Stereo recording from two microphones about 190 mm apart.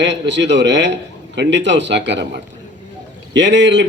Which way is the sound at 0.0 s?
70° right (ahead or behind).